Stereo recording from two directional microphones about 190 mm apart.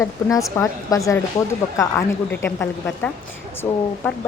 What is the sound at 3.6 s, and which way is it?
Speech, 15° left (ahead or behind).